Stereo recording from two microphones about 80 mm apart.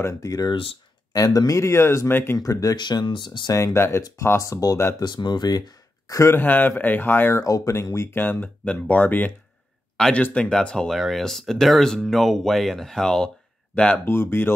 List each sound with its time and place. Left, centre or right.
0.0 s speech: left
0.5 s speech: left
1.1 s speech: left
2.3 s speech: left
2.8 s speech: left
3.5 s speech: left
5.0 s speech: left
6.3 s speech: left
7.4 s speech: left
9.9 s speech: centre
10.9 s speech: centre
14.0 s speech: left